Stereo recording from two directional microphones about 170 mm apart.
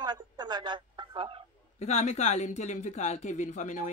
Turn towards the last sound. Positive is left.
turn(degrees=45)  # may be behind; listen again after turning